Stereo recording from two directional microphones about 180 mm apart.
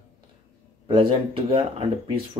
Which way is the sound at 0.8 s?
30° right (ahead or behind).